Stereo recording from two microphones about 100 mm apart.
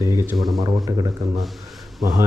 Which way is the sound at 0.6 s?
35° right (ahead or behind).